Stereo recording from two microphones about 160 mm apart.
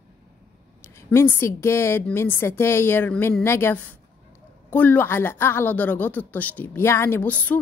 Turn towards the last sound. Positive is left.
turn(degrees=10)  # may be behind; listen again after turning